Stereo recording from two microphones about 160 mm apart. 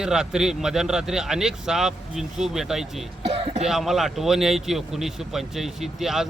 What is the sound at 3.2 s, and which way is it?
Cough, 40° right (ahead or behind).